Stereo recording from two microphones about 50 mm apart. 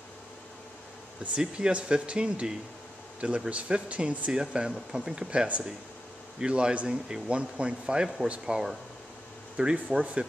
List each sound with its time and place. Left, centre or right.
1.2 s speech: right